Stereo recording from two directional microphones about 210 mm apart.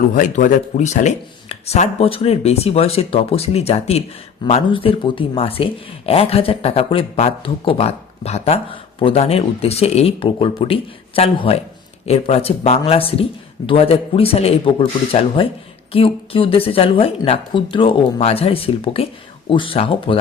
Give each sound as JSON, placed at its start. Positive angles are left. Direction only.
{"t": 0.1, "sound": "speech", "side_deg": 40}